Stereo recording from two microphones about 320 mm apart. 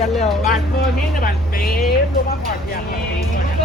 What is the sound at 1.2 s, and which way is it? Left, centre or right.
Speech, left.